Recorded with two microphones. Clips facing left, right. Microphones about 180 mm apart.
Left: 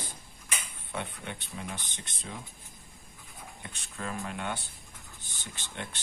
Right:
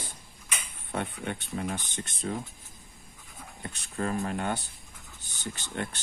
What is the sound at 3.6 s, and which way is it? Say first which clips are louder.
Speech: right 8 dB; 40° right (ahead or behind).